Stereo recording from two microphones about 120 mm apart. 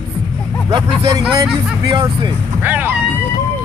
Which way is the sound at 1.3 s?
40° right (ahead or behind).